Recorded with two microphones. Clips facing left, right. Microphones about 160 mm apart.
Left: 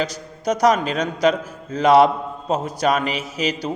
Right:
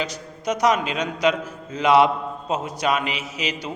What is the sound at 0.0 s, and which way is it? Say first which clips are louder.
A man's voice: left 3 dB; 35° left (ahead or behind).